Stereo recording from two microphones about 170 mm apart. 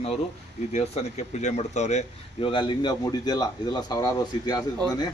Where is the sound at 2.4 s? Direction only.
30° left (ahead or behind).